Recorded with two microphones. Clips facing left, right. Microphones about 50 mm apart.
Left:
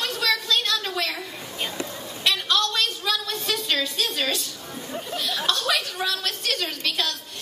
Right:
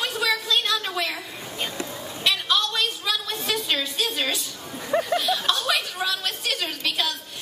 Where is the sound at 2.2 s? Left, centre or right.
Centre.